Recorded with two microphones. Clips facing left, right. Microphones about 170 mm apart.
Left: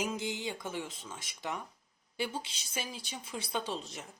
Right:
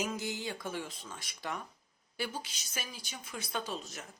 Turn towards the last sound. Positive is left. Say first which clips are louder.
# left 2 dB
turn(degrees=30)  # may be behind; listen again after turning